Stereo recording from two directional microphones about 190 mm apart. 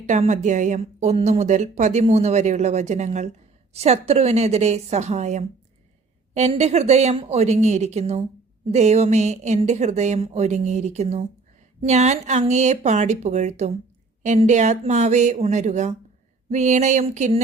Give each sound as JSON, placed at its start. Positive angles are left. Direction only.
{"t": 0.0, "sound": "a woman's voice", "side_deg": -40}